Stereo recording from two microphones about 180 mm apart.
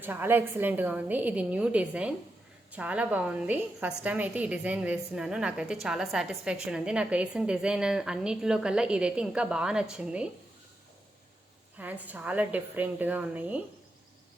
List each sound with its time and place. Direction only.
0.0 s a woman's voice: 10° right (ahead or behind)
11.8 s a woman's voice: 10° right (ahead or behind)